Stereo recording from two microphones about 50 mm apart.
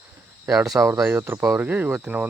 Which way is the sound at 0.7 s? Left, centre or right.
Right.